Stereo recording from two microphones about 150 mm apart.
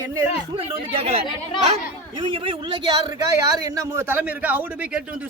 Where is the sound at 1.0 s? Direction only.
45° right (ahead or behind).